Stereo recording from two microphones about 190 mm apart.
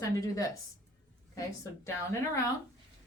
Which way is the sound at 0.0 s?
20° left (ahead or behind).